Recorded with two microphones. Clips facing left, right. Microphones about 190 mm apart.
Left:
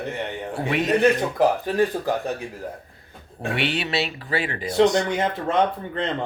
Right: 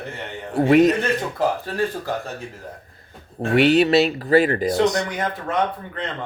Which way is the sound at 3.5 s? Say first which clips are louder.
Right 11 dB; 40° right (ahead or behind).